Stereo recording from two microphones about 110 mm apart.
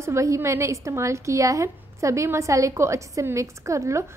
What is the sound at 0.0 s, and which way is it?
A woman's voice, 25° right (ahead or behind).